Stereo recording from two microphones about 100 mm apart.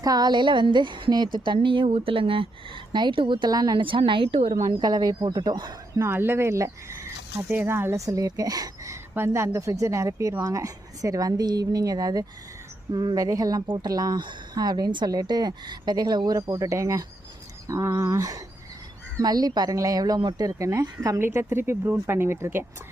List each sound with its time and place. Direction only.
0.0 s a woman's voice: 40° right (ahead or behind); by 4.5 s 65° right (ahead or behind)
4.6 s a woman's voice: 45° right (ahead or behind)
6.0 s speech: 25° right (ahead or behind)
7.4 s a woman's voice: 20° right (ahead or behind); by 21.2 s 35° right (ahead or behind)
21.2 s speech: 25° right (ahead or behind)